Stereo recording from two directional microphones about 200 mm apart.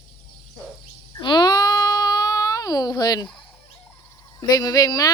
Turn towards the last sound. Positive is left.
turn(degrees=20)  # may be behind; listen again after turning